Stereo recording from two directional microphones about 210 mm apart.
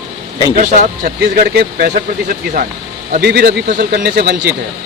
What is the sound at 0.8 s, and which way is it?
Speech, 40° right (ahead or behind).